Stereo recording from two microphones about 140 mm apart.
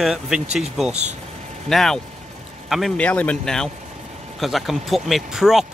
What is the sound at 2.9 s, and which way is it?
Speech, 10° left (ahead or behind).